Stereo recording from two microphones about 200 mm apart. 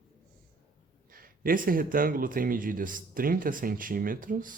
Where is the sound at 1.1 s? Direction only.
45° right (ahead or behind).